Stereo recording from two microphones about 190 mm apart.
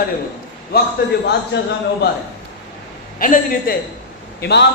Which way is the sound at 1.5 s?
75° left (ahead or behind).